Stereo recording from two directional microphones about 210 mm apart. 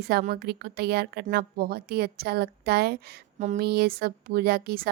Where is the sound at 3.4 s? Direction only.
35° right (ahead or behind).